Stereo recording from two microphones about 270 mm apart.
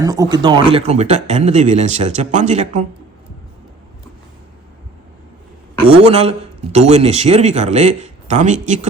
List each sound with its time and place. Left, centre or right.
0.0 s speech: centre
5.8 s speech: right